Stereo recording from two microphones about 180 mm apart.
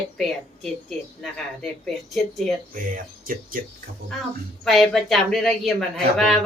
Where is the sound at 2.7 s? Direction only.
50° right (ahead or behind).